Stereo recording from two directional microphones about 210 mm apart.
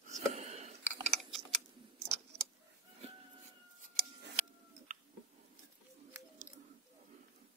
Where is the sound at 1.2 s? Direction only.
Centre (ahead or behind).